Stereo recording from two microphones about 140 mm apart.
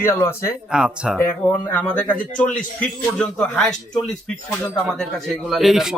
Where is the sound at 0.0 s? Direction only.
15° left (ahead or behind).